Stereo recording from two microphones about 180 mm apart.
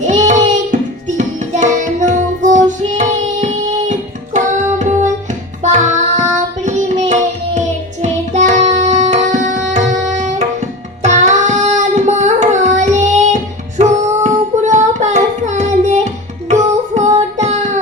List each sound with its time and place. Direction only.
0.0 s music: 40° right (ahead or behind)
8.0 s tabla: 40° right (ahead or behind)
11.0 s child singing: 40° right (ahead or behind)
16.5 s music: 40° right (ahead or behind)